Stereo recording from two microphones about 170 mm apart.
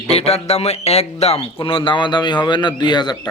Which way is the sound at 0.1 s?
40° left (ahead or behind).